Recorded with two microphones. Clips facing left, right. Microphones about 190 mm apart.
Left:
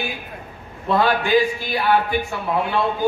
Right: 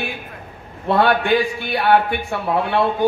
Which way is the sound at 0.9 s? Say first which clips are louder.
Right 2 dB; 60° right (ahead or behind).